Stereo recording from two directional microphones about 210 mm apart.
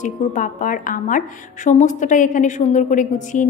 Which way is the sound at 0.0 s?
40° left (ahead or behind).